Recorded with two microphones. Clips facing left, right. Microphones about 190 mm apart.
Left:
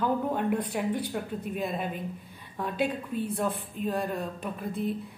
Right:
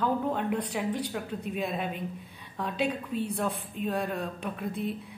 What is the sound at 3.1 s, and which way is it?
Speech, 50° left (ahead or behind).